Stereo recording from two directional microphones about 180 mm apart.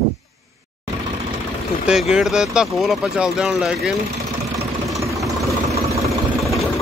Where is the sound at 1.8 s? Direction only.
5° right (ahead or behind).